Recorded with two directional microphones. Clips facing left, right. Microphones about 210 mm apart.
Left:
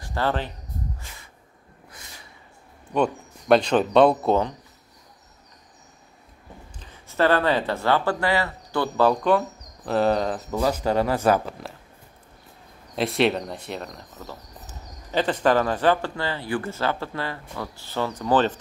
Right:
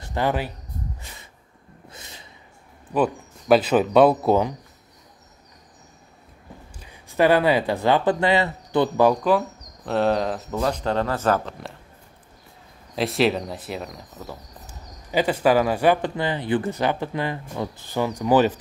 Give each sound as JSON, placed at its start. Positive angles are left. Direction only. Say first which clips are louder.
{"t": 0.0, "sound": "speech", "louder": "right 2 dB", "side_deg": -15}
{"t": 1.9, "sound": "a sound", "louder": "right 3 dB", "side_deg": -25}
{"t": 2.9, "sound": "speech", "louder": "right 1 dB", "side_deg": -5}
{"t": 6.8, "sound": "speech", "louder": "right 2 dB", "side_deg": -15}
{"t": 9.8, "sound": "speech", "louder": "even", "side_deg": 0}
{"t": 12.9, "sound": "speech", "louder": "right 1 dB", "side_deg": 0}